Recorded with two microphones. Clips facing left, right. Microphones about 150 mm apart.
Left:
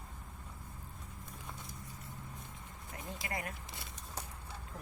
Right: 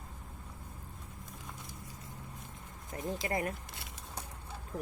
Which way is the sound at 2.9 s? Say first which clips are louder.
Right 7 dB; 30° right (ahead or behind).